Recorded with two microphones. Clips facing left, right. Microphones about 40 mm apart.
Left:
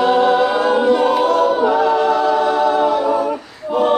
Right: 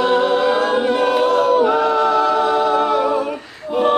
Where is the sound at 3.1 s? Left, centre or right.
Centre.